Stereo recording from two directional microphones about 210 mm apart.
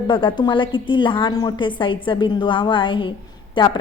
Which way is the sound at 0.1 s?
25° left (ahead or behind).